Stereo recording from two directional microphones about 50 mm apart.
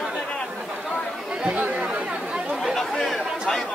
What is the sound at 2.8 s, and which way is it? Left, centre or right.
Chatter, centre.